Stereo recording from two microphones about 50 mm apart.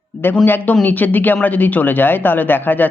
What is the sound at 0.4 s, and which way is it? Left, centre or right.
Speech, left.